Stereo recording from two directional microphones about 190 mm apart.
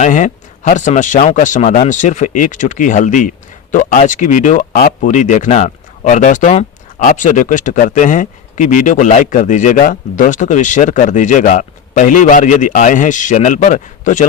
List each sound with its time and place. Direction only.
0.0 s speech: 40° left (ahead or behind)